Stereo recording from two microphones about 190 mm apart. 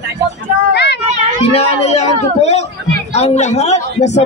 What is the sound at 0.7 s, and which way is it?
Speech, 65° left (ahead or behind).